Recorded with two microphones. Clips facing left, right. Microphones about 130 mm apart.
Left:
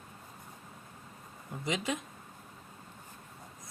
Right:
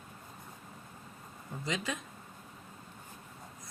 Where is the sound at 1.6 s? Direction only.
20° left (ahead or behind).